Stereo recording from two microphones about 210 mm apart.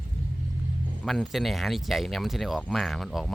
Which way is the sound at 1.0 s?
Centre (ahead or behind).